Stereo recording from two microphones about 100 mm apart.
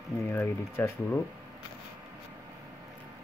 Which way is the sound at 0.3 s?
25° left (ahead or behind).